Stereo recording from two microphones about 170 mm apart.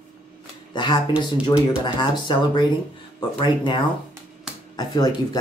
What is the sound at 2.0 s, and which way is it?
Speech, 25° left (ahead or behind).